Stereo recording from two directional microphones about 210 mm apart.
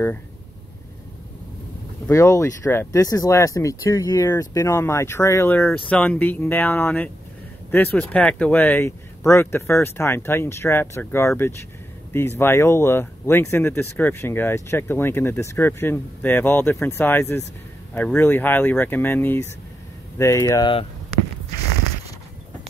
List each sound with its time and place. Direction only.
2.0 s speech: 15° left (ahead or behind)